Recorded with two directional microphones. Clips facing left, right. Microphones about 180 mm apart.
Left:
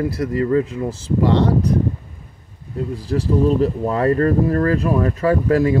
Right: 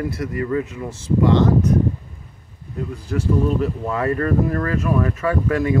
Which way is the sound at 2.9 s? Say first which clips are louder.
Left 2 dB; 35° left (ahead or behind).